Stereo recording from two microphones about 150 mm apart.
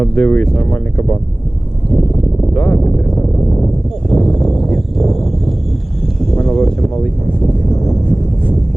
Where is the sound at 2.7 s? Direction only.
20° left (ahead or behind).